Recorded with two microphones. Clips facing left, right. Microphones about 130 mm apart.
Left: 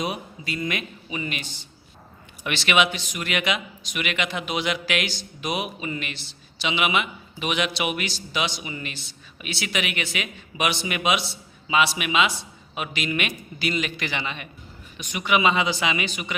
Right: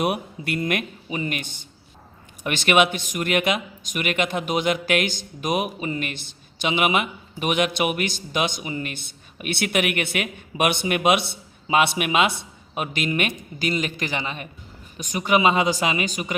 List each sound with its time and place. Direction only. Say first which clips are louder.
0.0 s a man's voice: right 5 dB; 60° right (ahead or behind); by 16.3 s 40° right (ahead or behind)